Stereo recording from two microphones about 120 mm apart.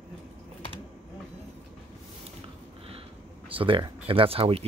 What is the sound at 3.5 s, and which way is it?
Speech, 45° right (ahead or behind).